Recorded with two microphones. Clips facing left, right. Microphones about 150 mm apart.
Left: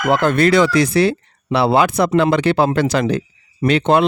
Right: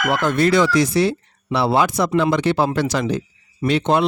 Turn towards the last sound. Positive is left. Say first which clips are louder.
# left 3 dB
turn(degrees=60)  # may be behind; listen again after turning